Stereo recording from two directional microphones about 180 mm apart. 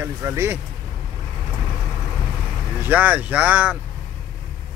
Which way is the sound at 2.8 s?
10° right (ahead or behind).